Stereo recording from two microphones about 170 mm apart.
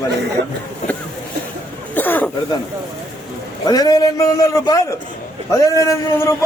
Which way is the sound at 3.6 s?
25° left (ahead or behind).